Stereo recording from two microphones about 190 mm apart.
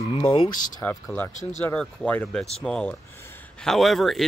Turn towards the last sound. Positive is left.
turn(degrees=0)  # may be behind; listen again after turning